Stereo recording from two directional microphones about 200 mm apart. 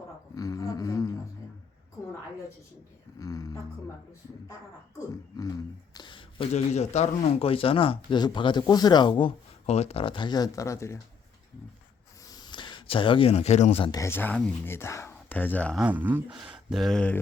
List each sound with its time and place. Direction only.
0.3 s a sound: 15° left (ahead or behind)
3.2 s speech: 15° left (ahead or behind)
5.9 s speech: 25° left (ahead or behind)
12.3 s speech: 20° left (ahead or behind)
13.9 s speech: 15° left (ahead or behind)
15.8 s speech: 10° right (ahead or behind)